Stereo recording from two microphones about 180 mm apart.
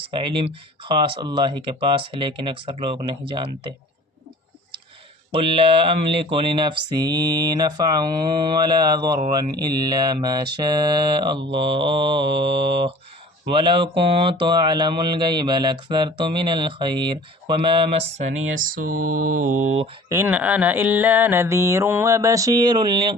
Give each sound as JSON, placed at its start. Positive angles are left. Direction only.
{"t": 0.0, "sound": "speech", "side_deg": -30}
{"t": 5.3, "sound": "speech", "side_deg": -30}
{"t": 18.2, "sound": "mantra", "side_deg": -45}
{"t": 20.1, "sound": "mantra", "side_deg": -15}